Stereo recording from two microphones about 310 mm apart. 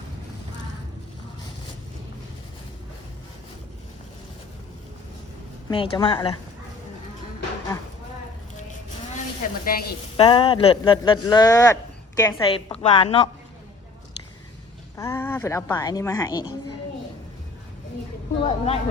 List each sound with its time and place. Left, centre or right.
5.6 s speech: centre
9.4 s a sound: left
10.2 s speech: centre
14.9 s speech: centre
18.4 s speech: centre